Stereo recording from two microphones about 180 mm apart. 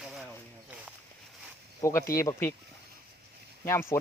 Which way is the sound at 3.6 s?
15° left (ahead or behind).